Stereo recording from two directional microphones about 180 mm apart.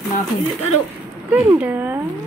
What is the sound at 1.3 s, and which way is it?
Speech, 10° right (ahead or behind).